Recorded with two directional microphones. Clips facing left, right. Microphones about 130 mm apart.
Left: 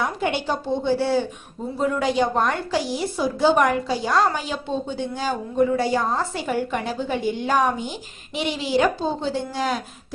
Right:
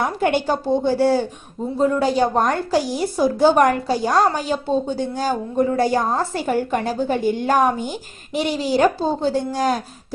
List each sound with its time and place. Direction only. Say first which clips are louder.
0.0 s a woman's voice: right 5 dB; 50° right (ahead or behind)
1.8 s a woman's voice: right 3 dB; 35° right (ahead or behind)